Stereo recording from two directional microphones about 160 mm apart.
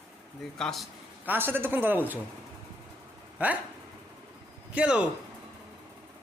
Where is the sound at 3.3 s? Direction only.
10° right (ahead or behind).